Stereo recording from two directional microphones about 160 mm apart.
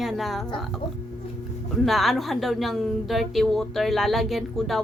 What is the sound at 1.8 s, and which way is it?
A woman's voice, centre (ahead or behind).